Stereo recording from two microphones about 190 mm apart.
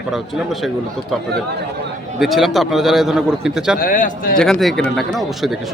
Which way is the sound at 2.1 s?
Centre (ahead or behind).